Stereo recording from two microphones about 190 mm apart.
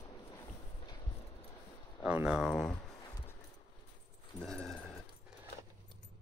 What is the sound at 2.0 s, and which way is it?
Speech, 5° right (ahead or behind).